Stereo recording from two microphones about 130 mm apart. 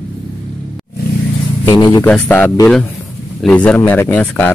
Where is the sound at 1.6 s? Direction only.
35° left (ahead or behind).